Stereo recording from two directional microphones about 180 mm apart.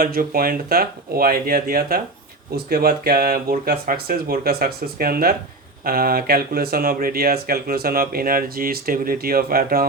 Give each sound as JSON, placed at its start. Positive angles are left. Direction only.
{"t": 0.0, "sound": "speech", "side_deg": -55}